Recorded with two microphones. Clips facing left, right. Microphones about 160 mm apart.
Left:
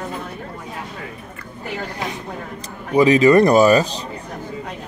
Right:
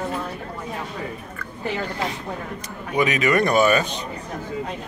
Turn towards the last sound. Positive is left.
turn(degrees=35)  # may be behind; listen again after turning